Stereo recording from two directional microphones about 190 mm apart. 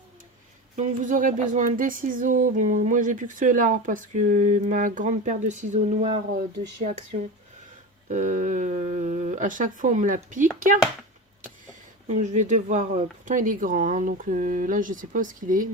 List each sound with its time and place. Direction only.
0.8 s speech: 40° right (ahead or behind)
8.1 s speech: 40° right (ahead or behind)
12.0 s speech: 40° right (ahead or behind)